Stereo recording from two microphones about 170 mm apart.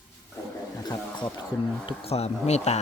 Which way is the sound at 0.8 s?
20° left (ahead or behind).